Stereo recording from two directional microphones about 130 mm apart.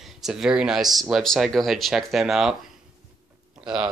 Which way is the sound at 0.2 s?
5° right (ahead or behind).